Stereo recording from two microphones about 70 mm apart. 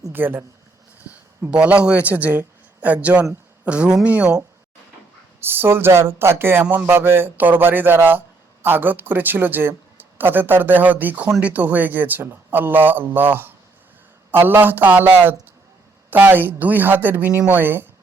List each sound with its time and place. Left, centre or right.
0.1 s speech: right
1.1 s a sound: right
1.5 s speech: centre
5.4 s speech: right